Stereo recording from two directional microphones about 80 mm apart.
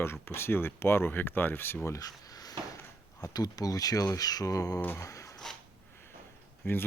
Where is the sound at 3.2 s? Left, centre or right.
Left.